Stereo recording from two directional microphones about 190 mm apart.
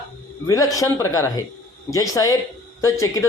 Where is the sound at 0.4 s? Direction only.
15° left (ahead or behind).